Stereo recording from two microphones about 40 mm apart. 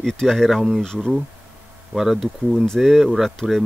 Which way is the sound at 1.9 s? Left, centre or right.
Centre.